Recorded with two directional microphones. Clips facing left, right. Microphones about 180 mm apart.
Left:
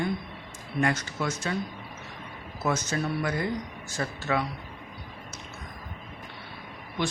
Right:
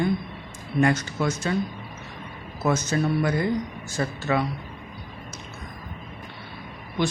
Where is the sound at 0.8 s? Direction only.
35° right (ahead or behind).